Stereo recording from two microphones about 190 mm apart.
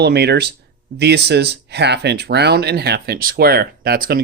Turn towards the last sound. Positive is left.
turn(degrees=-55)  # may be behind; listen again after turning